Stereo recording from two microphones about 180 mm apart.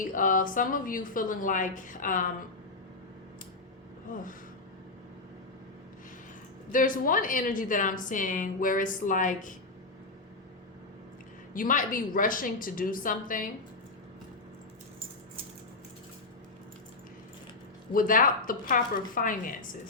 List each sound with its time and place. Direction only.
0.0 s a woman's voice: 50° left (ahead or behind)
4.1 s a woman's voice: 50° left (ahead or behind)
6.7 s a woman's voice: 50° left (ahead or behind)
11.5 s a woman's voice: 45° left (ahead or behind)
17.9 s a woman's voice: 50° left (ahead or behind)